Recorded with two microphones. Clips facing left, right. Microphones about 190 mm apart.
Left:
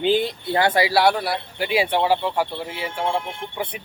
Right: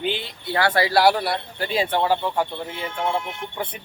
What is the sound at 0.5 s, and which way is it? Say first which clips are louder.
Speech: left 1 dB; 20° left (ahead or behind).